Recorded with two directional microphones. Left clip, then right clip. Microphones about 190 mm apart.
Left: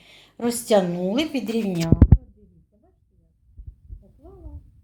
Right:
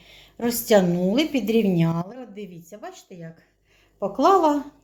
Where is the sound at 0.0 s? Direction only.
Centre (ahead or behind).